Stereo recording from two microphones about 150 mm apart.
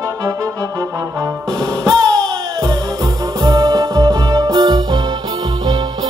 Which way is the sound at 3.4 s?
25° right (ahead or behind).